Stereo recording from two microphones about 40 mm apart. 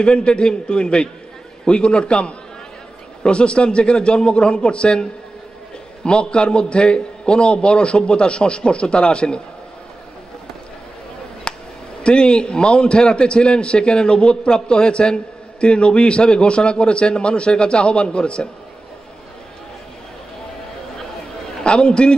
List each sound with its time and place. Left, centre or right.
0.0 s a man's voice: left
6.0 s a man's voice: left
11.5 s a sound: left
12.0 s a man's voice: left
21.6 s a man's voice: left